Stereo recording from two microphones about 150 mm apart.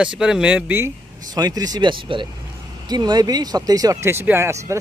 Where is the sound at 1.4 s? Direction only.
25° right (ahead or behind).